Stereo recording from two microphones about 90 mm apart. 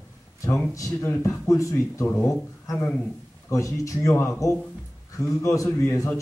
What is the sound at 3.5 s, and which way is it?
A man's voice, 35° left (ahead or behind).